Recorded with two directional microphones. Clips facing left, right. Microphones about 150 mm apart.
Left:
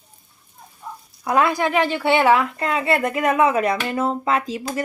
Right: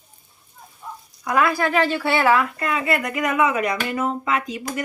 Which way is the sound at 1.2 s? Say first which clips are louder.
Left 1 dB; 25° left (ahead or behind).